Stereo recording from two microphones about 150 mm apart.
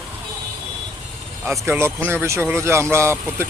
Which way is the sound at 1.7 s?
15° right (ahead or behind).